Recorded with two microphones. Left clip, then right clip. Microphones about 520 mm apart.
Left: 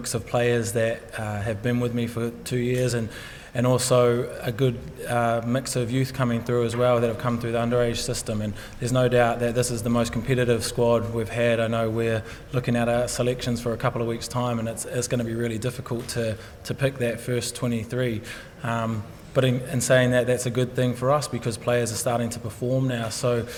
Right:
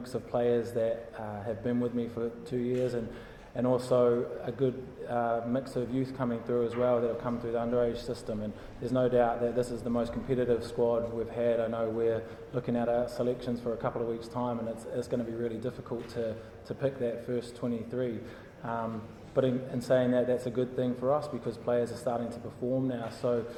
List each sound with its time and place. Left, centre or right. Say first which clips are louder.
0.1 s a man's voice: left 5 dB; left
19.4 s a man's voice: left 5 dB; left